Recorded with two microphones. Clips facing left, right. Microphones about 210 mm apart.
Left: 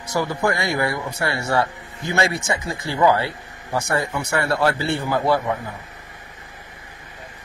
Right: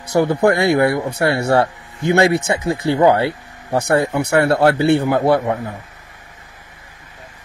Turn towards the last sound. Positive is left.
turn(degrees=-60)  # may be behind; listen again after turning